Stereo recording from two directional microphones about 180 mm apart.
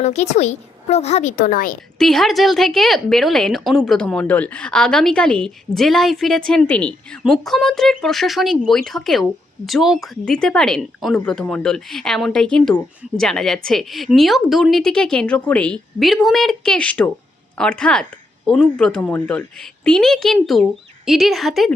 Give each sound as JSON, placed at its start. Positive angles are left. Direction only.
{"t": 0.0, "sound": "a woman's voice", "side_deg": 40}
{"t": 2.0, "sound": "a woman's voice", "side_deg": 0}